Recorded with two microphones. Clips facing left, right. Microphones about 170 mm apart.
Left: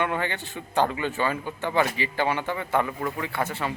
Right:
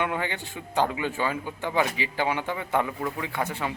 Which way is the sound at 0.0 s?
10° right (ahead or behind).